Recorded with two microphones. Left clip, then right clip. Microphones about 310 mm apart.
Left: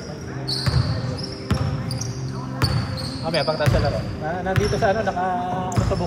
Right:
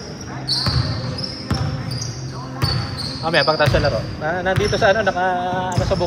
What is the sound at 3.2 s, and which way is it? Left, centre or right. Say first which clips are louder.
Speech: right 6 dB; right.